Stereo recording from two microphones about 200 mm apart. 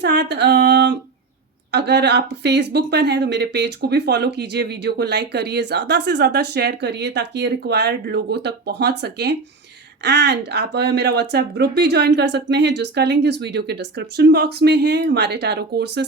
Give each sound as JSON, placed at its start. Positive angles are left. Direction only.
{"t": 0.0, "sound": "speech", "side_deg": -60}